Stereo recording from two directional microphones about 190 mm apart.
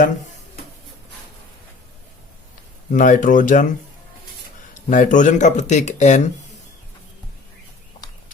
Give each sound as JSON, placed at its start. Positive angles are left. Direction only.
{"t": 2.9, "sound": "speech", "side_deg": 45}
{"t": 4.7, "sound": "speech", "side_deg": 40}